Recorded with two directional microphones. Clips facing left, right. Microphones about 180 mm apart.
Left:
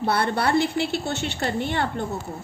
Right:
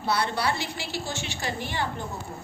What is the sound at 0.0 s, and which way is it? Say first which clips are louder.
A woman's voice: left 4 dB; 55° left (ahead or behind).